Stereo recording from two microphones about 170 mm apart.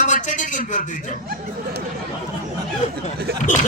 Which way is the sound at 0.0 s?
50° left (ahead or behind).